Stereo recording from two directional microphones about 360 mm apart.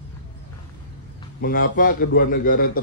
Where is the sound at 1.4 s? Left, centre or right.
Left.